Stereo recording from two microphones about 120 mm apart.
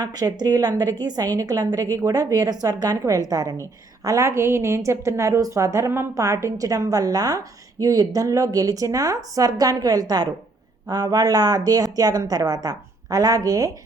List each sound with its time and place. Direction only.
0.0 s a woman's voice: 35° right (ahead or behind)